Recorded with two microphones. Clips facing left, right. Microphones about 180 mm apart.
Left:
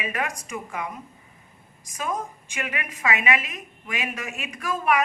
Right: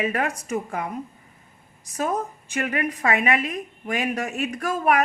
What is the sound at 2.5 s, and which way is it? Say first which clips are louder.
A woman's voice: right 7 dB; 40° right (ahead or behind).